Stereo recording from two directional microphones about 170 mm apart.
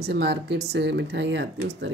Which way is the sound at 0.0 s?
80° right.